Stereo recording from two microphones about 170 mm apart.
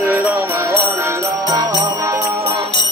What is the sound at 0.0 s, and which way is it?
Music, 15° right (ahead or behind).